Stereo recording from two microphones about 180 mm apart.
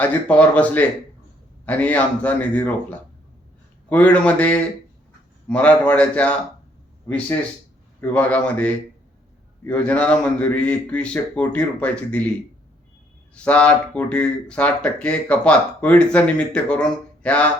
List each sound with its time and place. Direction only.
0.0 s speech: 10° left (ahead or behind)
3.8 s speech: 5° left (ahead or behind)
8.1 s speech: 5° left (ahead or behind)
13.3 s speech: 5° left (ahead or behind)